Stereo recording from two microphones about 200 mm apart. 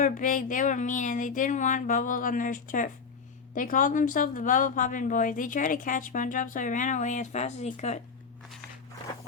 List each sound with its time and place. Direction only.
0.0 s speech: 40° left (ahead or behind)